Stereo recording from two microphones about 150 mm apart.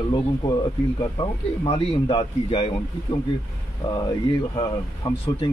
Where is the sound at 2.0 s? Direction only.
30° left (ahead or behind).